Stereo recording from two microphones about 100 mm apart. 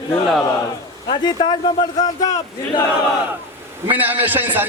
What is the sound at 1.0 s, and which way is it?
A man's voice, 50° left (ahead or behind).